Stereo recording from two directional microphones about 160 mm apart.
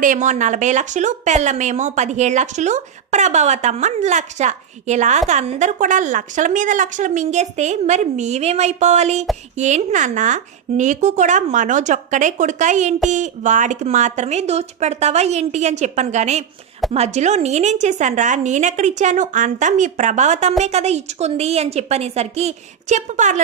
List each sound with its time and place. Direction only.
0.0 s a woman's voice: 55° right (ahead or behind)